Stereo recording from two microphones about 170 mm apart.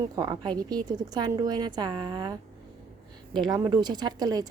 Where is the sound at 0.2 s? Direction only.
25° right (ahead or behind).